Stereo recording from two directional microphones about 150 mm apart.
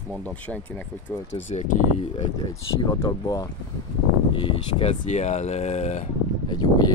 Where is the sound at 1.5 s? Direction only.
50° left (ahead or behind).